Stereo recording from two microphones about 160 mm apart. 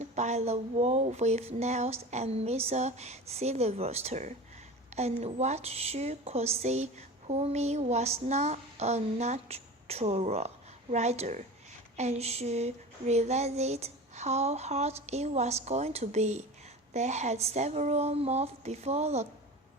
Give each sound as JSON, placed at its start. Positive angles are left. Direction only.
{"t": 0.0, "sound": "a woman's voice", "side_deg": -45}